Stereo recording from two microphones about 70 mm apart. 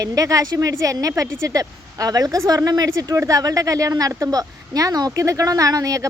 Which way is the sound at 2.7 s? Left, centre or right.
Right.